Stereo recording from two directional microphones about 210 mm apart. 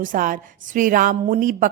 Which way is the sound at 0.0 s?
40° right (ahead or behind).